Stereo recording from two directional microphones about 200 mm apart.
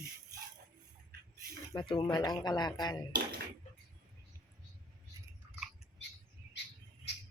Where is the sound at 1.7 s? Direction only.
25° left (ahead or behind).